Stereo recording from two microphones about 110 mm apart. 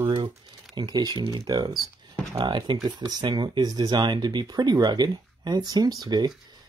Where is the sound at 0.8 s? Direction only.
40° right (ahead or behind).